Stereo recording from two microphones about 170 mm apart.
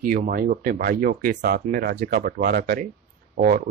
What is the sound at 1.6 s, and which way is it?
Speech, 55° right (ahead or behind).